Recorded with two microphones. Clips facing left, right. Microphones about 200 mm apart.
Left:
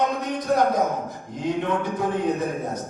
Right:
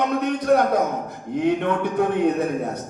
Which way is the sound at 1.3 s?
60° right (ahead or behind).